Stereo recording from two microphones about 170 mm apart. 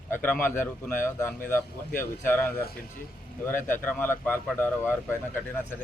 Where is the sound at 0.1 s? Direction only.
10° left (ahead or behind).